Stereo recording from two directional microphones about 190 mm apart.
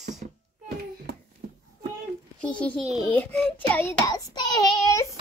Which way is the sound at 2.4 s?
5° left (ahead or behind).